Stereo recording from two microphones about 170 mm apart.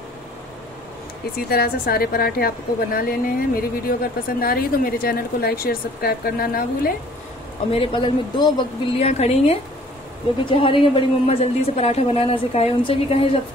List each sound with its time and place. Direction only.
1.5 s a woman's voice: 65° left (ahead or behind)
7.7 s speech: 30° left (ahead or behind)
10.4 s a woman's voice: 30° left (ahead or behind)